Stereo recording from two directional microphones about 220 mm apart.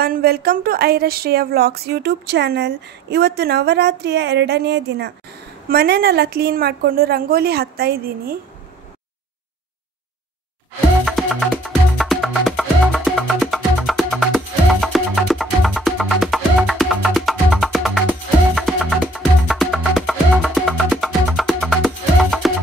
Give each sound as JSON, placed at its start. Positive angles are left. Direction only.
{"t": 0.0, "sound": "speech", "side_deg": -45}
{"t": 11.1, "sound": "music", "side_deg": 0}